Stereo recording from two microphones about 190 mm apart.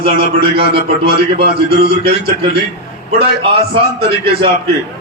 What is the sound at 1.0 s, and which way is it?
Speech, 60° right (ahead or behind).